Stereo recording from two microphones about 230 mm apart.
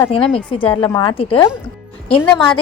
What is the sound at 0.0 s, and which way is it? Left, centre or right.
A woman's voice, left.